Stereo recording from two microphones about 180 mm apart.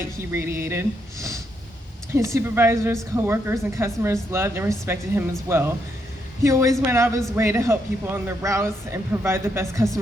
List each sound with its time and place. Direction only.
0.0 s a woman's voice: 15° right (ahead or behind)